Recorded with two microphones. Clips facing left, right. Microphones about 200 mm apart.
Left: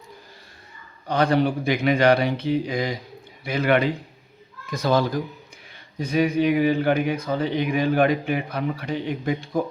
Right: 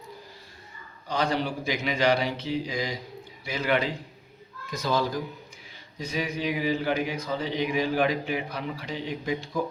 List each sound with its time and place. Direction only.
1.0 s speech: 60° left (ahead or behind)